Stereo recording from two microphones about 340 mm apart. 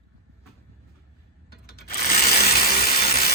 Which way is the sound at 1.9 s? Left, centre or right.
Left.